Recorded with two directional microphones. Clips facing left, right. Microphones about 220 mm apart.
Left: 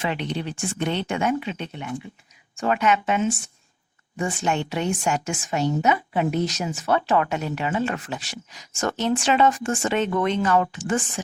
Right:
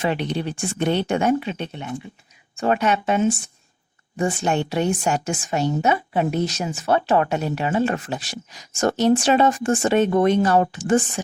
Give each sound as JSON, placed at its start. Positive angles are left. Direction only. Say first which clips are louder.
{"t": 0.0, "sound": "a woman's voice", "louder": "right 4 dB", "side_deg": -40}